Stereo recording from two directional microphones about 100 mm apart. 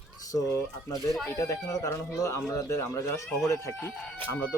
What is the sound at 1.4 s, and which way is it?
Speech, 35° left (ahead or behind).